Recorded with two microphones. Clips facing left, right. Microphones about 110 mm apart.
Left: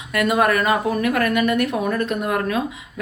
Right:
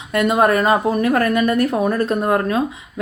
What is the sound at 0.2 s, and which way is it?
Speech, 25° right (ahead or behind).